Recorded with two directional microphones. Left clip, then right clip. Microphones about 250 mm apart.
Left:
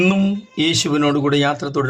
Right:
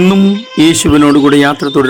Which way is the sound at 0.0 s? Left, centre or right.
Right.